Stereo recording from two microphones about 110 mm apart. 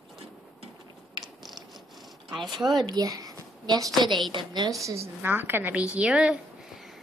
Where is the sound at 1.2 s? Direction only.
Centre (ahead or behind).